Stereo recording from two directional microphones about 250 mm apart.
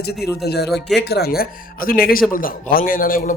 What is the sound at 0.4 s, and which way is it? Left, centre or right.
Speech, left.